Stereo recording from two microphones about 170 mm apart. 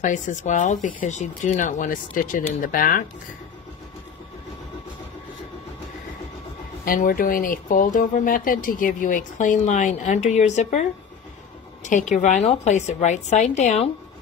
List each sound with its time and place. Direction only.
0.0 s speech: 45° left (ahead or behind)
6.8 s speech: 55° left (ahead or behind)